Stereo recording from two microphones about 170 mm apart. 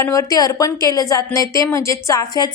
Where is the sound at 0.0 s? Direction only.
20° left (ahead or behind).